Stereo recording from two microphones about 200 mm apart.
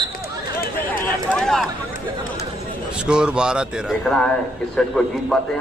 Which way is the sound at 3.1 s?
5° right (ahead or behind).